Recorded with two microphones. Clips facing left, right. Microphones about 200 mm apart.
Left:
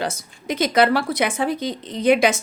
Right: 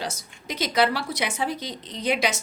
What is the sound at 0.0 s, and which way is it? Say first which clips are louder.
A woman's voice: left 6 dB; 55° left (ahead or behind).